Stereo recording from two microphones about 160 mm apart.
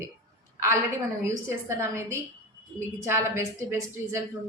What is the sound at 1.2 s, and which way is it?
A woman's voice, 15° right (ahead or behind).